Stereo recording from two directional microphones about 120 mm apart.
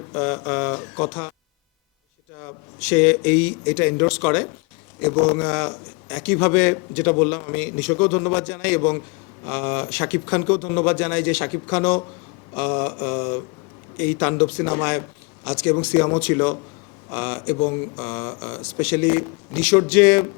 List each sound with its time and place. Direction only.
0.1 s a man's voice: 15° left (ahead or behind)
2.8 s a man's voice: 10° left (ahead or behind)